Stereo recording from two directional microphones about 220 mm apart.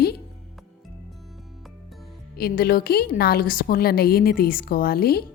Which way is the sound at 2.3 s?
45° left (ahead or behind).